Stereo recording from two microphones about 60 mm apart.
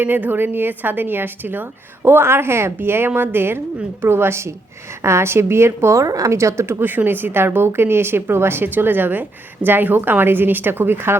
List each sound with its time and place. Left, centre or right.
0.0 s a woman's voice: right
6.0 s a woman's voice: right
6.3 s a woman's voice: right